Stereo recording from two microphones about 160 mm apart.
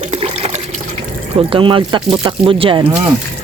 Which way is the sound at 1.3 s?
30° right (ahead or behind).